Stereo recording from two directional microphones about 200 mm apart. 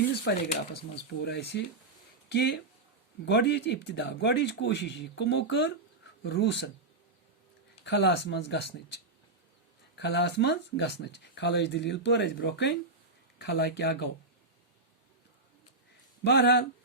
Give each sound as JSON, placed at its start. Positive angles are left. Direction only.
{"t": 0.1, "sound": "speech", "side_deg": 55}
{"t": 7.9, "sound": "speech", "side_deg": 60}
{"t": 16.2, "sound": "speech", "side_deg": 55}